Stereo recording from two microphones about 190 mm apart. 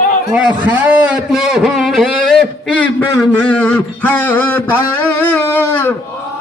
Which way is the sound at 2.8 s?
5° left (ahead or behind).